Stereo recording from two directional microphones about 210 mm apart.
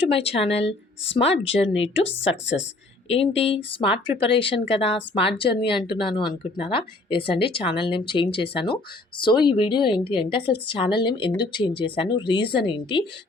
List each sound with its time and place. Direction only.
0.0 s speech: 25° left (ahead or behind)
2.2 s a woman's voice: 60° left (ahead or behind)
3.1 s speech: 30° left (ahead or behind)